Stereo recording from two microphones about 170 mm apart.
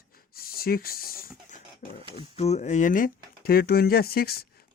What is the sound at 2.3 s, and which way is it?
Speech, 40° left (ahead or behind).